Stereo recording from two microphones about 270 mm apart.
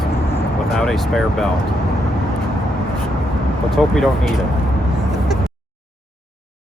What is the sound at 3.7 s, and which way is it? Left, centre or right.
Speech, centre.